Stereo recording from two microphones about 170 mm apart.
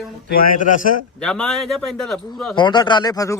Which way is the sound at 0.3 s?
60° left (ahead or behind).